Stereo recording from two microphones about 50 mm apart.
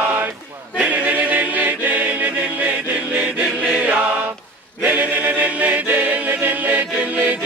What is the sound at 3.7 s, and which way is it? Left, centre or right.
Chant, right.